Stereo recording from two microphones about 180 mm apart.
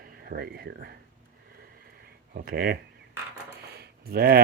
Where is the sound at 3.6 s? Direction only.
60° right (ahead or behind).